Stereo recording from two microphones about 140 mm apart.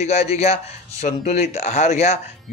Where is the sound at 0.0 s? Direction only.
50° left (ahead or behind).